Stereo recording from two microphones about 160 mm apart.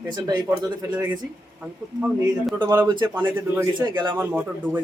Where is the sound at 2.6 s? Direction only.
20° right (ahead or behind).